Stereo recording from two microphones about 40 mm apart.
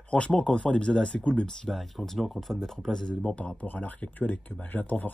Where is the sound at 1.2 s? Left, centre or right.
Left.